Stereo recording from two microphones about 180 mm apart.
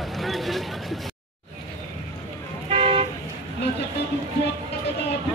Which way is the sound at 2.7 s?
35° right (ahead or behind).